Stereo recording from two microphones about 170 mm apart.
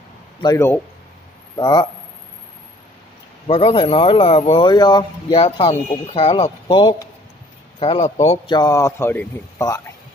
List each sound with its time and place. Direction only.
0.4 s speech: 25° left (ahead or behind)
3.4 s speech: 35° left (ahead or behind)
8.5 s a man's voice: 20° left (ahead or behind)